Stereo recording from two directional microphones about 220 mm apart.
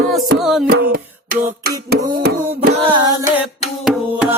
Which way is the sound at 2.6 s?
30° right (ahead or behind).